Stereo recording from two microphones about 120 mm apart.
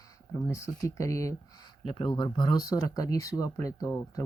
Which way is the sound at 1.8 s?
45° left (ahead or behind).